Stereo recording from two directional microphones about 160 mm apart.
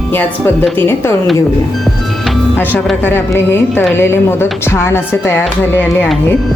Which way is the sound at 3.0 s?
15° left (ahead or behind).